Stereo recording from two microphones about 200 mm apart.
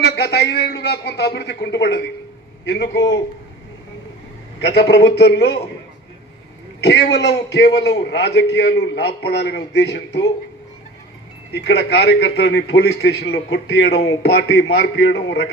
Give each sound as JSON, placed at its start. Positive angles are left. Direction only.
{"t": 0.0, "sound": "a man's voice", "side_deg": 55}
{"t": 4.6, "sound": "a man's voice", "side_deg": 55}
{"t": 6.8, "sound": "a man's voice", "side_deg": 60}
{"t": 11.5, "sound": "a man's voice", "side_deg": 55}